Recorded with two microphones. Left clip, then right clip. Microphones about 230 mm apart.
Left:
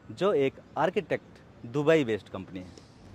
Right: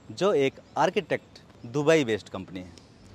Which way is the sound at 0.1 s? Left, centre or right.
Centre.